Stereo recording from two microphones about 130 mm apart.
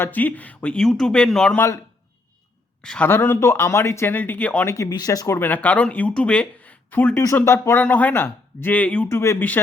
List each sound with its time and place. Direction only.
0.0 s speech: 15° left (ahead or behind)
1.5 s speech: 20° left (ahead or behind)
2.8 s speech: 5° left (ahead or behind)
3.1 s speech: 15° left (ahead or behind)
4.7 s speech: 25° left (ahead or behind)
5.4 s speech: 15° left (ahead or behind)